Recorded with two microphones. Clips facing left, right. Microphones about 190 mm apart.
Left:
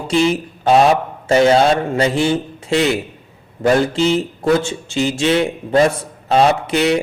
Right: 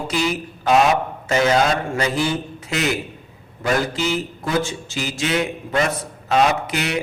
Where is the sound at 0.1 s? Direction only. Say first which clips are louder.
Left 9 dB; 25° left (ahead or behind).